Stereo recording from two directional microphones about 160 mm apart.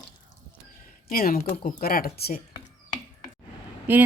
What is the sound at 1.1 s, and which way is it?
Speech, 70° left (ahead or behind).